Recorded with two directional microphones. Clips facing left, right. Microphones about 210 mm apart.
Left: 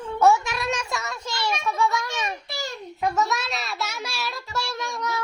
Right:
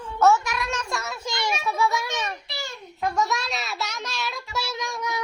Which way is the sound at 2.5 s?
40° left (ahead or behind).